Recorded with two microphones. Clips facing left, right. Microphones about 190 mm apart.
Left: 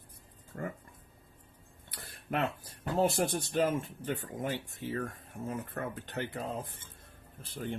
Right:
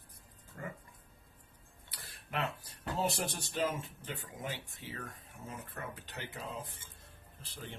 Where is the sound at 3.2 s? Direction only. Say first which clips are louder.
Left 6 dB; 55° left (ahead or behind).